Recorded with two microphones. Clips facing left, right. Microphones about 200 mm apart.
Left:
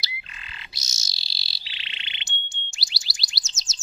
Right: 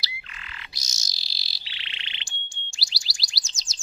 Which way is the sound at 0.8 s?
25° left (ahead or behind).